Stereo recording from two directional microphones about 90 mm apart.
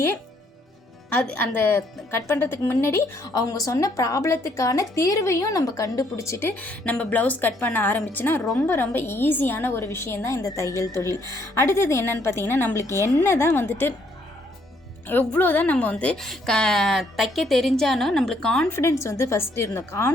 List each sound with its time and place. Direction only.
1.1 s a woman's voice: 15° left (ahead or behind)
2.0 s a woman's voice: 30° left (ahead or behind)
3.5 s a woman's voice: 40° left (ahead or behind)
6.6 s a woman's voice: 15° left (ahead or behind)
15.0 s a woman's voice: 20° left (ahead or behind)
16.1 s a woman's voice: 5° left (ahead or behind)
18.7 s a woman's voice: 30° left (ahead or behind)